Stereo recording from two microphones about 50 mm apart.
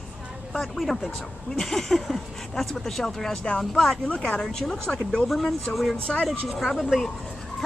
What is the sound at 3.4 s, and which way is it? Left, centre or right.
Speech, left.